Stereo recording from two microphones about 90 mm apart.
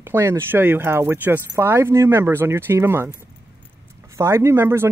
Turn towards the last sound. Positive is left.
turn(degrees=-25)  # may be behind; listen again after turning